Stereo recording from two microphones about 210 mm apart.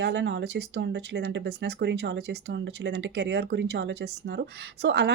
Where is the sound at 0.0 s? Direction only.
55° right (ahead or behind).